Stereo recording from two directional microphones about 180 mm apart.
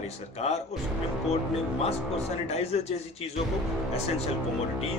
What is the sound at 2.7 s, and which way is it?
Speech, 35° left (ahead or behind).